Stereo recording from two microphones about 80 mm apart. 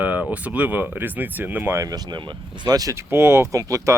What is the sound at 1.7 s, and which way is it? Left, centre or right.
Speech, right.